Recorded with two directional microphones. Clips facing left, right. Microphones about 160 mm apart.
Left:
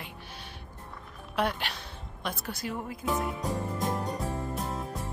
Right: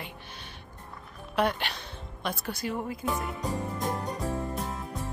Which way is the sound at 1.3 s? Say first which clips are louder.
Right 2 dB; centre (ahead or behind).